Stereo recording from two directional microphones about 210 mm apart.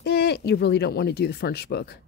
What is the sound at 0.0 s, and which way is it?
Speech, 50° left (ahead or behind).